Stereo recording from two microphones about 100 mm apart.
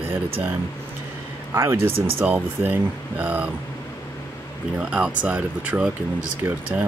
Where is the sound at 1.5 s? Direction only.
25° right (ahead or behind).